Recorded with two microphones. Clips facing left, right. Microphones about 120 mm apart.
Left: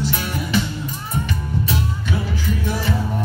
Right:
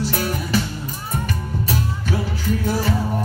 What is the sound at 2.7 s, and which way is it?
Music, 40° right (ahead or behind).